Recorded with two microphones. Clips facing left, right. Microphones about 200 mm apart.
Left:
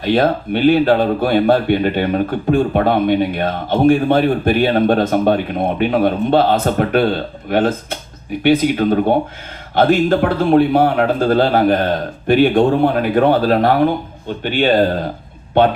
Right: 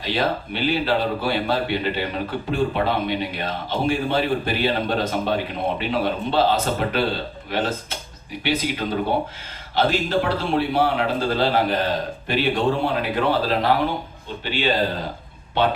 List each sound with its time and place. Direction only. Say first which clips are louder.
0.0 s speech: left 9 dB; 50° left (ahead or behind)